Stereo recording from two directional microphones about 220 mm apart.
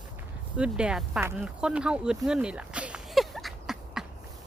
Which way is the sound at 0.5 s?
5° right (ahead or behind).